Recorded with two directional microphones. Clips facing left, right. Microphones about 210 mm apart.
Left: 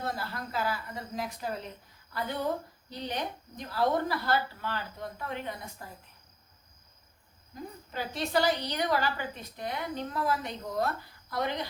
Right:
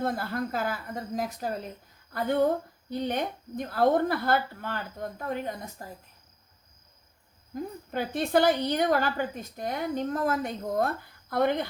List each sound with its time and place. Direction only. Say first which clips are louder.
0.0 s a woman's voice: right 7 dB; 55° right (ahead or behind)
7.5 s a woman's voice: right 7 dB; 55° right (ahead or behind)